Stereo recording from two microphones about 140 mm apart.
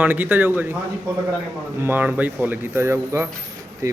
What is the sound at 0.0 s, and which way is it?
Speech, 10° right (ahead or behind).